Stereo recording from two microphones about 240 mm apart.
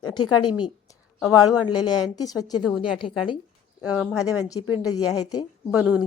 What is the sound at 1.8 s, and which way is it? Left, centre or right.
Speech, centre.